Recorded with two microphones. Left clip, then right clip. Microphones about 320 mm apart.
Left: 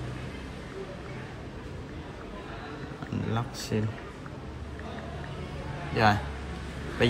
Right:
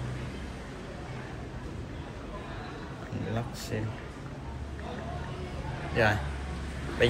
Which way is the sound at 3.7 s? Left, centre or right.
Left.